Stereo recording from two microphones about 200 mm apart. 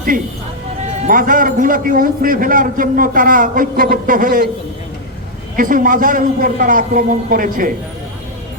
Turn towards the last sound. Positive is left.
turn(degrees=-45)  # may be behind; listen again after turning